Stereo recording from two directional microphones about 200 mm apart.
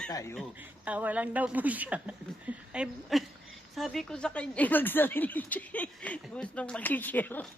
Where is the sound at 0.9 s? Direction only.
10° right (ahead or behind).